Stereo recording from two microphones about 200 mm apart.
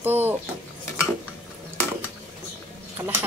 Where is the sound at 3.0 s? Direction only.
15° right (ahead or behind).